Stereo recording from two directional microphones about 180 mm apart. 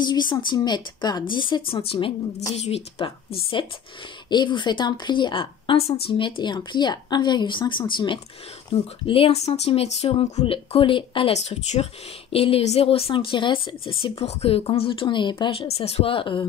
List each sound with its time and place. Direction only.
0.0 s speech: 25° left (ahead or behind)